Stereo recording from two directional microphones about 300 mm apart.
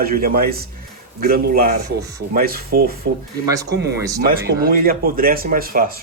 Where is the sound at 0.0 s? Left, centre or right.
Right.